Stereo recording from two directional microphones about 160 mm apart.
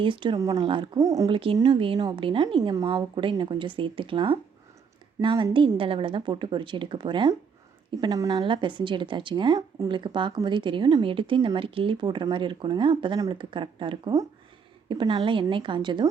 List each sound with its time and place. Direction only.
0.0 s a woman's voice: 30° right (ahead or behind)